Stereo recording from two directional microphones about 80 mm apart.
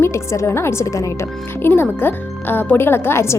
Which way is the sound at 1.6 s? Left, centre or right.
Left.